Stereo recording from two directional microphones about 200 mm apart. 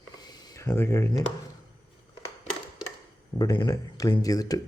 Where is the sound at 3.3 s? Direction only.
20° left (ahead or behind).